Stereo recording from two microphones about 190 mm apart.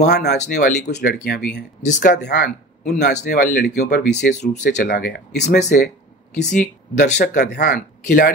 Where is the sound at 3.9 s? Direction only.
60° left (ahead or behind); by 7.2 s 40° left (ahead or behind).